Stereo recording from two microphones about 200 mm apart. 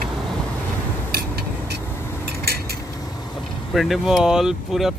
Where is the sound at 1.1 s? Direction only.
50° right (ahead or behind).